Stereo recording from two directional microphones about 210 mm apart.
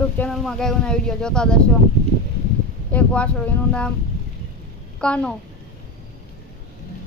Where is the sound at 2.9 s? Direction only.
5° left (ahead or behind).